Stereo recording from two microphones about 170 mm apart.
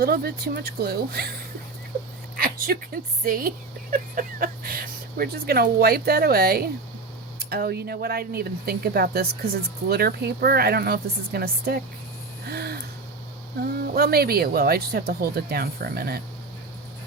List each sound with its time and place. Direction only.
0.0 s speech: 65° right (ahead or behind)
2.3 s a woman's voice: 60° right (ahead or behind)
12.5 s a sound: 65° right (ahead or behind)
13.6 s speech: 65° right (ahead or behind)